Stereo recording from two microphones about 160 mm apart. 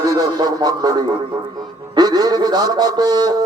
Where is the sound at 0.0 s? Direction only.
25° right (ahead or behind).